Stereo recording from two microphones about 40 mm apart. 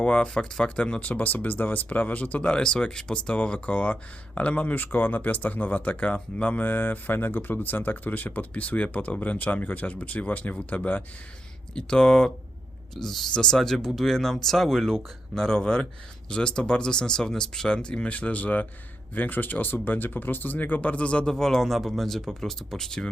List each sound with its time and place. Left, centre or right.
0.0 s speech: left
3.7 s speech: left
6.6 s speech: left
11.7 s speech: left
13.0 s speech: centre
13.3 s speech: centre
18.1 s speech: left
21.2 s speech: centre